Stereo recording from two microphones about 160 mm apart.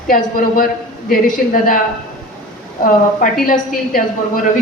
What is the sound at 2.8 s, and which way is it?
A woman's voice, 60° left (ahead or behind).